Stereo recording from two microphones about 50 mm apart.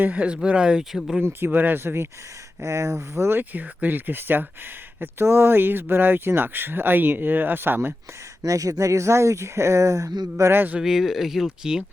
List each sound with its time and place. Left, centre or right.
0.1 s speech: right; by 1.2 s centre
1.2 s speech: right
1.5 s speech: right
2.6 s speech: right
3.3 s speech: right
4.9 s speech: right
8.8 s speech: right
10.5 s speech: right
10.8 s speech: centre